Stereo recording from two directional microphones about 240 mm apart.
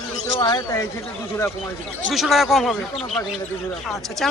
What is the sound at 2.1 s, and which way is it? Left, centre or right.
Speech, centre.